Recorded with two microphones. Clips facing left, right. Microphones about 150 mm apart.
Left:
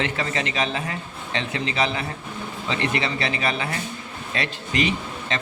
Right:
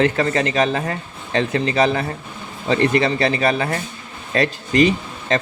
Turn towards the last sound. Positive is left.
turn(degrees=-40)  # may be behind; listen again after turning